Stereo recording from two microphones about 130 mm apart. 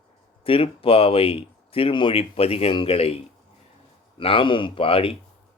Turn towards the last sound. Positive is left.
turn(degrees=45)  # may be behind; listen again after turning